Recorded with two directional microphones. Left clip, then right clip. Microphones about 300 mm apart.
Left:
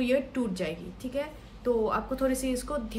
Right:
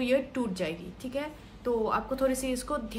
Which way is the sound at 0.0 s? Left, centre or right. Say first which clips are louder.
Even; centre.